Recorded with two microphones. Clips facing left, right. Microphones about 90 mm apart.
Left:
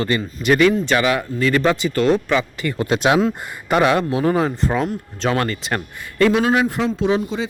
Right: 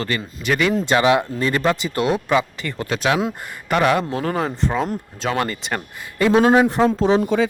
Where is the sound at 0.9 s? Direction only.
25° right (ahead or behind).